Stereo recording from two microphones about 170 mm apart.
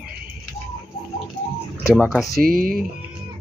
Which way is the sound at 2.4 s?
55° right (ahead or behind).